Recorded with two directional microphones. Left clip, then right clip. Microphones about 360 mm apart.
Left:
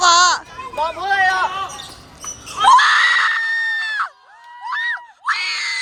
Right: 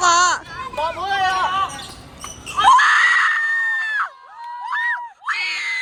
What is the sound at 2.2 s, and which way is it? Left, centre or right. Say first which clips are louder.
Screaming: even; centre.